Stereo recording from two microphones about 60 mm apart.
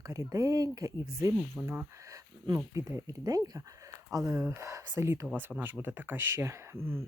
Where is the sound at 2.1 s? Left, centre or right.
Right.